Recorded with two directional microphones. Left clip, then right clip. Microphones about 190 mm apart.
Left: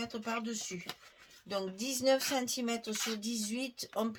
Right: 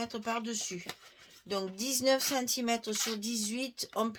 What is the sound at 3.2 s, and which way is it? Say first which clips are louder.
Speech: right 2 dB; 45° right (ahead or behind).